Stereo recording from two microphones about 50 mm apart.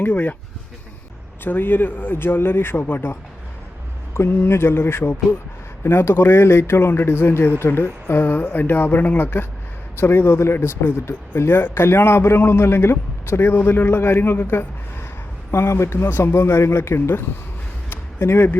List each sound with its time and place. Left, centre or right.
0.0 s speech: left
1.5 s a man's voice: left
4.1 s a man's voice: left
15.5 s a man's voice: left
17.8 s a sound: left